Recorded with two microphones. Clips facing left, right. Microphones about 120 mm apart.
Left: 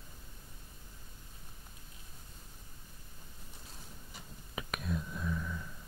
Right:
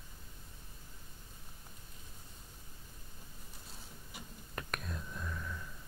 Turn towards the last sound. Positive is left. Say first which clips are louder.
# left 5 dB
turn(degrees=5)  # may be behind; listen again after turning